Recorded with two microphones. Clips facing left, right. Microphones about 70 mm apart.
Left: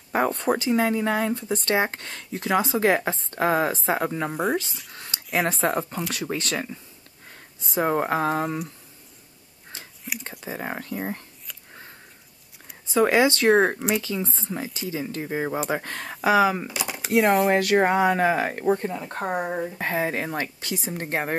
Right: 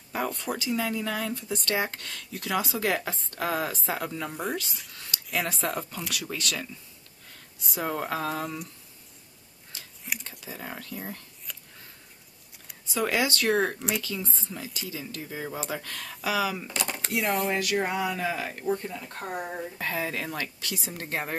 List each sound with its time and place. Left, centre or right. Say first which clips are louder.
0.1 s speech: left 8 dB; left
5.1 s a sound: right 2 dB; left
5.5 s speech: left 7 dB; left
10.1 s speech: left 1 dB; centre
10.4 s speech: left 7 dB; left
12.8 s speech: left 8 dB; left
16.6 s speech: left 1 dB; centre
17.1 s speech: left 9 dB; left
21.0 s speech: left 5 dB; left